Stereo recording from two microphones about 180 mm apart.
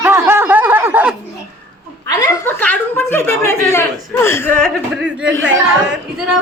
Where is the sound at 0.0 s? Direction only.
15° right (ahead or behind).